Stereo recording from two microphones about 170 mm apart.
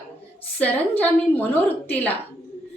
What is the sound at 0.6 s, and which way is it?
A woman's voice, 10° left (ahead or behind).